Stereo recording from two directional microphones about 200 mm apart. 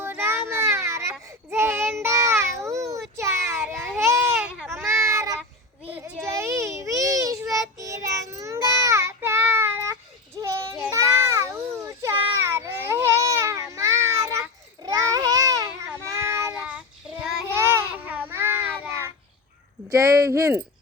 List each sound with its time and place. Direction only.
0.0 s child singing: 10° right (ahead or behind)
3.2 s baby cry: 15° right (ahead or behind)
4.8 s child singing: 15° right (ahead or behind)
5.9 s baby cry: 10° right (ahead or behind)
7.8 s child singing: 15° right (ahead or behind)
10.9 s a sound: 15° right (ahead or behind)
16.0 s child singing: 15° right (ahead or behind)
19.9 s a sound: 15° right (ahead or behind)